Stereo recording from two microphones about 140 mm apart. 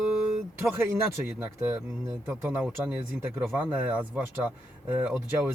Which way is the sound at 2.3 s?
20° right (ahead or behind).